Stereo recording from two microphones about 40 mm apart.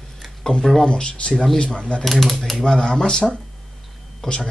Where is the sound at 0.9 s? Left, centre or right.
Left.